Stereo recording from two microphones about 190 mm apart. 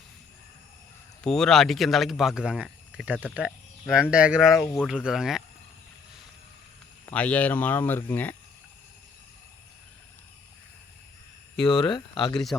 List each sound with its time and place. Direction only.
1.2 s speech: 5° left (ahead or behind)
4.6 s speech: 10° left (ahead or behind)
4.9 s speech: 5° right (ahead or behind)
7.0 s speech: 5° left (ahead or behind)
11.5 s speech: centre (ahead or behind)
11.8 s speech: 25° left (ahead or behind)